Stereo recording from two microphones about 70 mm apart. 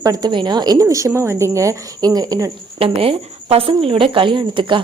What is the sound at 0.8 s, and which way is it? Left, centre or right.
Speech, right.